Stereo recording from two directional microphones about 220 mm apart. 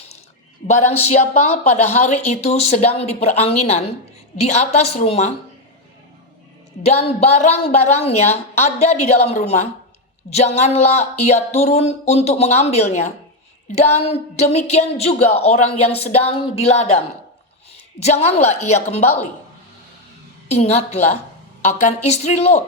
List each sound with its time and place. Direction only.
0.7 s speech: 30° left (ahead or behind)
6.8 s speech: 30° left (ahead or behind)
18.0 s speech: 30° left (ahead or behind)
20.5 s speech: 30° left (ahead or behind)